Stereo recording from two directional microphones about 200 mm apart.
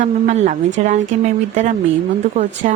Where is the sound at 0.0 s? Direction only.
35° right (ahead or behind).